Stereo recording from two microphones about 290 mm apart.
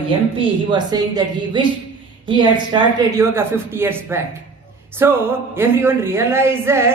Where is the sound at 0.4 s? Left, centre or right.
Centre.